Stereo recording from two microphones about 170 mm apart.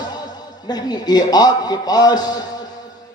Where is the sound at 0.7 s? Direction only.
25° left (ahead or behind).